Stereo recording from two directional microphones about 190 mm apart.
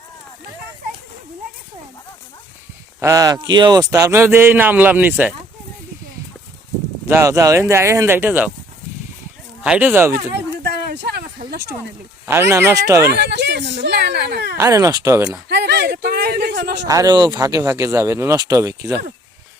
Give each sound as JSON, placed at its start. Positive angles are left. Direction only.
{"t": 3.0, "sound": "speech", "side_deg": -15}
{"t": 7.1, "sound": "speech", "side_deg": -15}
{"t": 9.6, "sound": "speech", "side_deg": -10}
{"t": 10.6, "sound": "a sound", "side_deg": -60}
{"t": 12.2, "sound": "speech", "side_deg": -15}
{"t": 13.1, "sound": "speech", "side_deg": -60}
{"t": 14.6, "sound": "speech", "side_deg": -15}
{"t": 15.4, "sound": "a man's voice", "side_deg": -60}
{"t": 16.8, "sound": "speech", "side_deg": -20}